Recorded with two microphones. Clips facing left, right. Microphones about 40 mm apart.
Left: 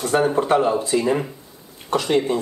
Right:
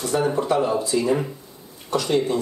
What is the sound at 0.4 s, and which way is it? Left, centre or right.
Speech, left.